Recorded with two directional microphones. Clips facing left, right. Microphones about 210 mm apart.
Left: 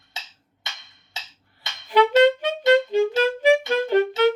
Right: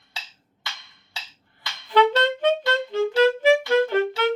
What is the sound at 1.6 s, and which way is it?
Clarinet, 15° left (ahead or behind).